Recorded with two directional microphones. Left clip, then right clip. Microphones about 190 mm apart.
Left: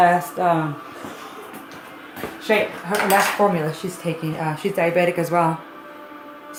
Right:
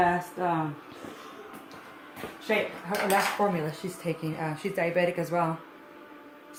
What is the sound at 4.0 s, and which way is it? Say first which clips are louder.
Speech: left 6 dB; 5° right (ahead or behind).